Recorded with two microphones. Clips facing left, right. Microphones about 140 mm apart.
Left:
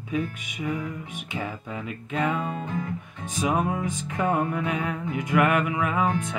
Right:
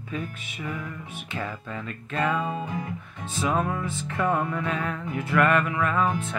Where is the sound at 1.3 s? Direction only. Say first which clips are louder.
Even; 15° left (ahead or behind).